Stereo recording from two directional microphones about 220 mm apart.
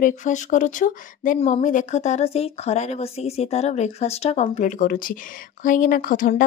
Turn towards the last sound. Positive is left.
turn(degrees=40)  # may be behind; listen again after turning